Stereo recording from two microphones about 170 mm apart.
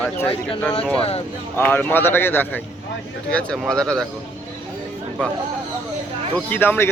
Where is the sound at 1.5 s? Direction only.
10° left (ahead or behind).